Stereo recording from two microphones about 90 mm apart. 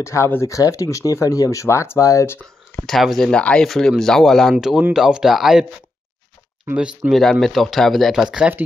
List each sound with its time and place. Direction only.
0.0 s speech: 30° left (ahead or behind)
2.9 s speech: centre (ahead or behind)
7.0 s speech: centre (ahead or behind)